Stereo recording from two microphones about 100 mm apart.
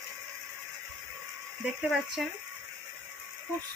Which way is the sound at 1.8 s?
5° right (ahead or behind).